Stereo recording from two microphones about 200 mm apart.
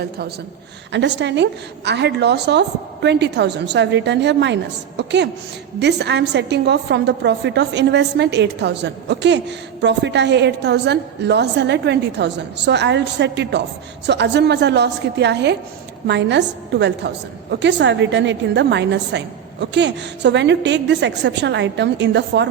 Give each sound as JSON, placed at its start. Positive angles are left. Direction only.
{"t": 0.9, "sound": "a woman's voice", "side_deg": -60}